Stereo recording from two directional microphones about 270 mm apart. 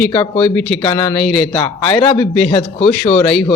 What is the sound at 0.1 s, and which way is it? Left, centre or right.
A man's voice, centre.